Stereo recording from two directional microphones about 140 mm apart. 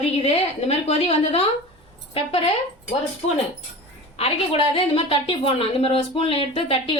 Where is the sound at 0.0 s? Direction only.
45° left (ahead or behind).